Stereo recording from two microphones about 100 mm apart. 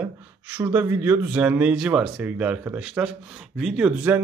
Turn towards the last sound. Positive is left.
turn(degrees=-15)  # may be behind; listen again after turning